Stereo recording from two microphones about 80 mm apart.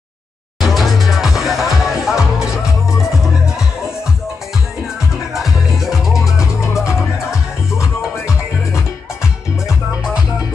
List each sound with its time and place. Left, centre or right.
0.6 s music: centre
5.3 s music: centre
6.6 s music: left
8.0 s music: centre